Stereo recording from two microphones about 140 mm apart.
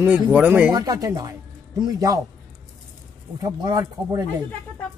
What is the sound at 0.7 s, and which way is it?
A man's voice, 25° right (ahead or behind).